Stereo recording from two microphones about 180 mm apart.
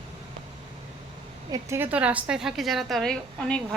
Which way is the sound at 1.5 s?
15° right (ahead or behind).